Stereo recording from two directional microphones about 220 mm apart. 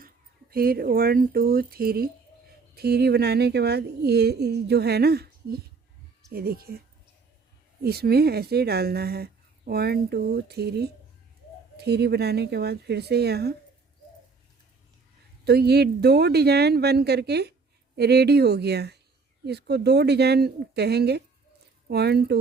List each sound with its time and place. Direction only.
0.5 s speech: 45° right (ahead or behind)
15.4 s speech: 45° right (ahead or behind)